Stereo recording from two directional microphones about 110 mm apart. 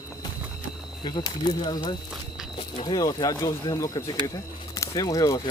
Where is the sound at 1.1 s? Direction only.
45° left (ahead or behind).